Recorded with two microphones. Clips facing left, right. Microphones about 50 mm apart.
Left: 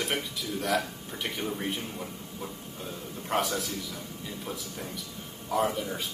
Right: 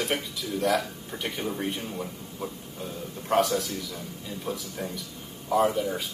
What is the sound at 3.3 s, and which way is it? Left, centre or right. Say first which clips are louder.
Speech: right 5 dB; centre.